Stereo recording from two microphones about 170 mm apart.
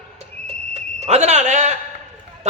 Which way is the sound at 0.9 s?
40° right (ahead or behind).